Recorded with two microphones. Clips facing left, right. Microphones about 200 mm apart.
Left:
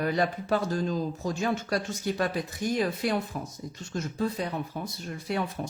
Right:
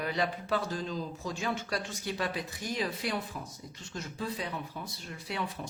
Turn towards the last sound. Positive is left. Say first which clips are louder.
# left 8 dB
turn(degrees=50)  # may be behind; listen again after turning